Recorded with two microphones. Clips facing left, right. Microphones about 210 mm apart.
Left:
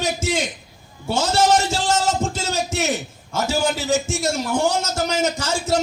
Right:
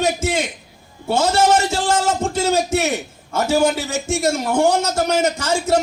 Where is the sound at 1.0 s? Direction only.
55° right (ahead or behind).